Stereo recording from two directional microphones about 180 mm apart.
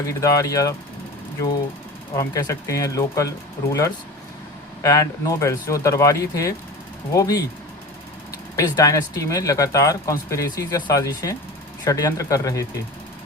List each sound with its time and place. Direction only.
0.1 s speech: 20° left (ahead or behind)
2.1 s speech: 20° left (ahead or behind)
8.5 s speech: 20° left (ahead or behind)